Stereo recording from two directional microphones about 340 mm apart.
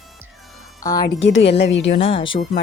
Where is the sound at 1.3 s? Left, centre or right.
Left.